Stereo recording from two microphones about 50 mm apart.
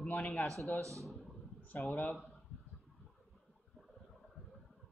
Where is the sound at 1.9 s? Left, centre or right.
Left.